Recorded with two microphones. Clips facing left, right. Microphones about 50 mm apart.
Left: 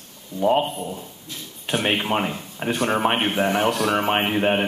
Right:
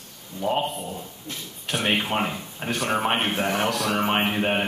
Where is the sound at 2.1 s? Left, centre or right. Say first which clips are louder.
Left 2 dB; centre.